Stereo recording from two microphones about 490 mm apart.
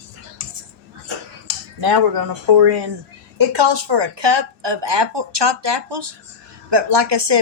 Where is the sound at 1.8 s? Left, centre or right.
Right.